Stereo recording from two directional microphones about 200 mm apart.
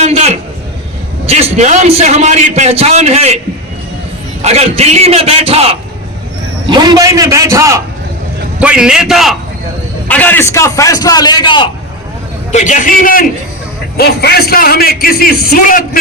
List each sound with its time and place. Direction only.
0.0 s a sound: 35° right (ahead or behind)
1.3 s a man's voice: 35° right (ahead or behind)
4.4 s a man's voice: 35° right (ahead or behind); by 9.3 s centre (ahead or behind)
10.1 s a man's voice: 10° left (ahead or behind)
12.5 s a man's voice: 35° left (ahead or behind)